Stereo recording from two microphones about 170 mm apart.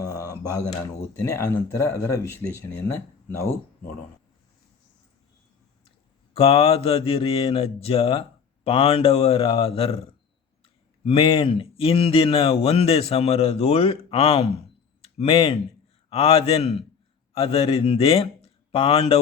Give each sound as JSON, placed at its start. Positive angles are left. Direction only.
{"t": 0.0, "sound": "a sound", "side_deg": 20}
{"t": 0.7, "sound": "speech", "side_deg": 20}
{"t": 6.3, "sound": "speech", "side_deg": 35}